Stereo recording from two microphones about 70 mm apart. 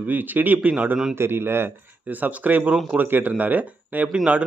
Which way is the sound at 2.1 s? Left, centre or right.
Right.